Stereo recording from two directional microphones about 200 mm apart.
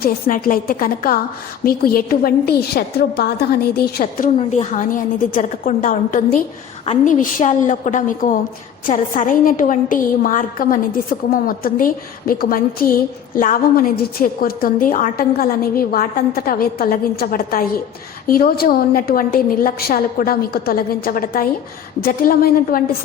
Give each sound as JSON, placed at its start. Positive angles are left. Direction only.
{"t": 0.0, "sound": "a woman's voice", "side_deg": 45}
{"t": 4.4, "sound": "a woman's voice", "side_deg": 35}